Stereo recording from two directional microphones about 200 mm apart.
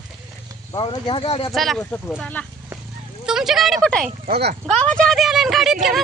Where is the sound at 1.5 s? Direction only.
Centre (ahead or behind).